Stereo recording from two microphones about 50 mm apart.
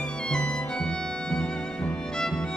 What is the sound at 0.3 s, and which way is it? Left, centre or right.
Music, centre.